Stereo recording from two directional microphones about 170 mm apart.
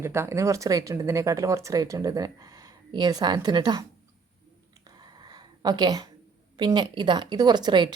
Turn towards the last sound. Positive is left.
turn(degrees=-25)  # may be behind; listen again after turning